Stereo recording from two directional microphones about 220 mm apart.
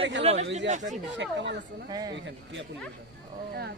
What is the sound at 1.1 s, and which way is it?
Speech, 55° right (ahead or behind).